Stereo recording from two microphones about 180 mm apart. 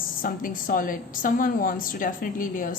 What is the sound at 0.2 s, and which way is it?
A woman's voice, 50° left (ahead or behind).